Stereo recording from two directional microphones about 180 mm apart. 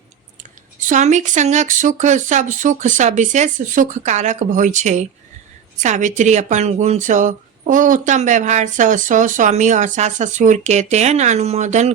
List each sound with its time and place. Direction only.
0.8 s speech: 45° right (ahead or behind)